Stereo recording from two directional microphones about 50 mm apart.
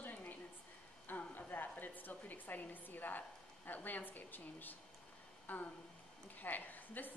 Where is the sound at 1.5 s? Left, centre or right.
Left.